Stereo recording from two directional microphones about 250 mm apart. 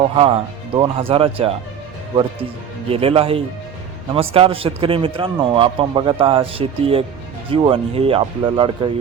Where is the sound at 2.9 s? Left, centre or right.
Right.